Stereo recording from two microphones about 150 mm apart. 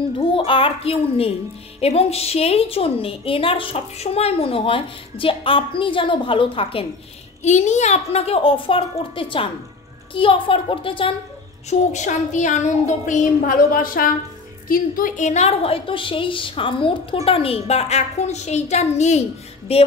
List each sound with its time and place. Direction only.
0.3 s a woman's voice: 35° left (ahead or behind)
7.4 s a woman's voice: 50° left (ahead or behind)
11.9 s a woman's voice: 55° left (ahead or behind)